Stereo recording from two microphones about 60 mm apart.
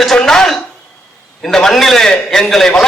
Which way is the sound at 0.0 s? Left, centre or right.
Centre.